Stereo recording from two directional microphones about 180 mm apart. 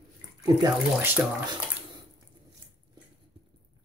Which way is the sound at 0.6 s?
10° right (ahead or behind).